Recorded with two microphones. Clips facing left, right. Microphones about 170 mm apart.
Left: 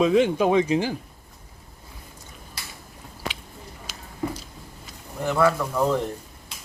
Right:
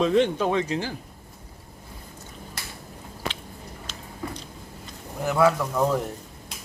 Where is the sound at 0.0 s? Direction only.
5° left (ahead or behind).